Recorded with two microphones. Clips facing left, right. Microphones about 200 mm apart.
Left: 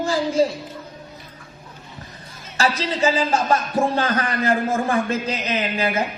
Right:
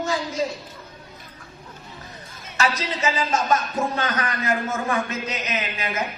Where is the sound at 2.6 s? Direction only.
30° left (ahead or behind).